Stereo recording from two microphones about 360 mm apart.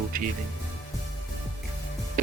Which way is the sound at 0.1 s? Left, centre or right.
Right.